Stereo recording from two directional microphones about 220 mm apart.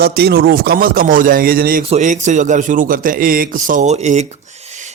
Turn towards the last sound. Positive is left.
turn(degrees=-30)  # may be behind; listen again after turning